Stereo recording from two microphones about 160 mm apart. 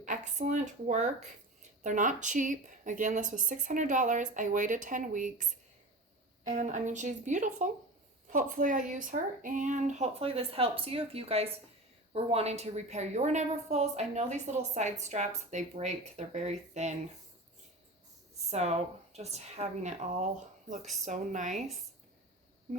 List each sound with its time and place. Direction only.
0.0 s speech: 50° right (ahead or behind)
18.5 s speech: 40° right (ahead or behind)